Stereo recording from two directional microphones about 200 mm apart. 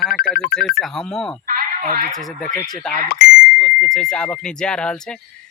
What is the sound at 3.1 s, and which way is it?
Speech, 50° left (ahead or behind).